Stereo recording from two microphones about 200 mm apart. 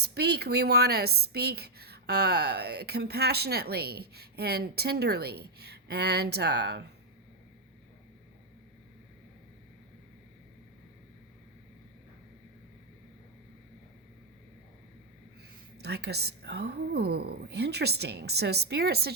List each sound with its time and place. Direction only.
0.0 s a woman's voice: 55° right (ahead or behind)
15.8 s a woman's voice: 55° right (ahead or behind)